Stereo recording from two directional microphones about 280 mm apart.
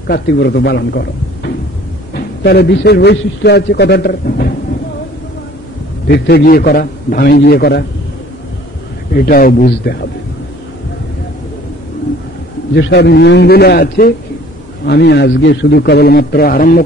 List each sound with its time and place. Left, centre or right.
0.1 s a man's voice: left
6.0 s a man's voice: left
9.1 s a man's voice: left
12.7 s a man's voice: left